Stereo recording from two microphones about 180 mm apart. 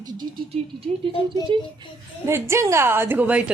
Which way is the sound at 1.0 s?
30° right (ahead or behind).